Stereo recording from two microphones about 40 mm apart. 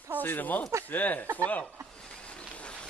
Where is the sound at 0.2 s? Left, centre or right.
Left.